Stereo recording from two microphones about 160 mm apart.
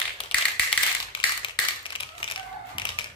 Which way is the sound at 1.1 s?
30° left (ahead or behind).